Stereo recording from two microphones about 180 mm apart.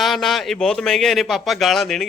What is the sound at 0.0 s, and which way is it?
A man's voice, centre (ahead or behind).